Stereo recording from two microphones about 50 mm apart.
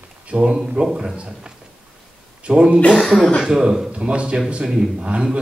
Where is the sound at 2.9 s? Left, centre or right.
Centre.